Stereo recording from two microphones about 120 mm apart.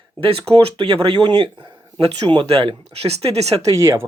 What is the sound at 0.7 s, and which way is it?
Speech, 45° right (ahead or behind).